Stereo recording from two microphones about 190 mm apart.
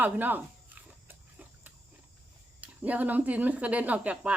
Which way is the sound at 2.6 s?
10° right (ahead or behind).